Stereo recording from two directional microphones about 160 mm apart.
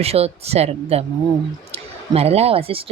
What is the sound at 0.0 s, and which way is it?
Speech, 40° right (ahead or behind).